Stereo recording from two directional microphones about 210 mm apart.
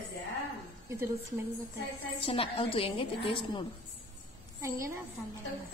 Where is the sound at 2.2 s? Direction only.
25° left (ahead or behind).